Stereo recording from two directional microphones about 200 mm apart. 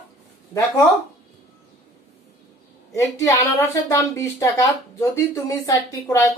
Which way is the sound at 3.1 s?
15° left (ahead or behind).